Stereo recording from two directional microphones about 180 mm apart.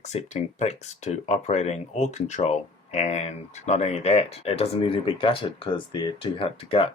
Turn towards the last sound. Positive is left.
turn(degrees=30)  # may be behind; listen again after turning